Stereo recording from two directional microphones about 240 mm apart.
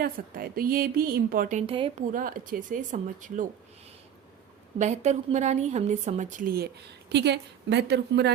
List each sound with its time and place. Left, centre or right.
0.0 s a woman's voice: right
2.1 s a woman's voice: right
4.8 s a woman's voice: right